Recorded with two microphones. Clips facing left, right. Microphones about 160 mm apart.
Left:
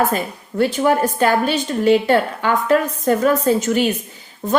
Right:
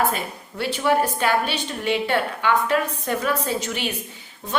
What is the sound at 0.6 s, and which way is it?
A woman's voice, 45° left (ahead or behind).